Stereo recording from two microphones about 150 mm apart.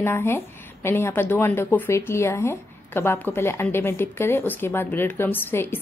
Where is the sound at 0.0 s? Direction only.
15° left (ahead or behind).